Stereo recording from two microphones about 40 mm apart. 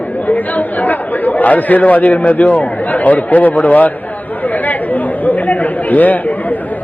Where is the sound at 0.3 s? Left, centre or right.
Left.